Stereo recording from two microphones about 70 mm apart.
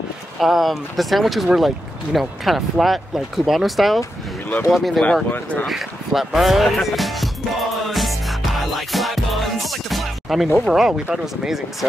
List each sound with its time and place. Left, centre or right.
0.4 s speech: centre
5.3 s speech: left
5.7 s music: centre